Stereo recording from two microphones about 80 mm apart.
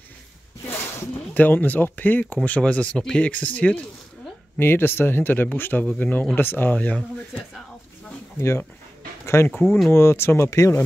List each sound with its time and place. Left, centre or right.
0.7 s speech: left
4.6 s speech: left
8.4 s speech: left